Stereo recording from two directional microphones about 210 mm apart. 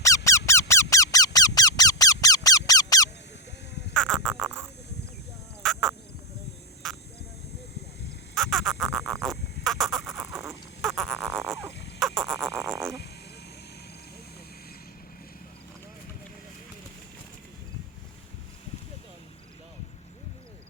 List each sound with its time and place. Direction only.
0.3 s squeak: 15° left (ahead or behind)
3.9 s frog: 5° left (ahead or behind)
5.6 s duck: centre (ahead or behind)
6.8 s a sound: centre (ahead or behind)
8.4 s duck: centre (ahead or behind)
11.7 s a sound: 55° left (ahead or behind)
11.9 s frog: centre (ahead or behind)